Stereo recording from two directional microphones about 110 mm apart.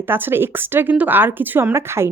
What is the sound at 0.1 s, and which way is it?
Speech, 20° right (ahead or behind).